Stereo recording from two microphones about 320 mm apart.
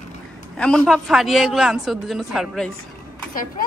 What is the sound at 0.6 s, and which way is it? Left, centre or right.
Speech, centre.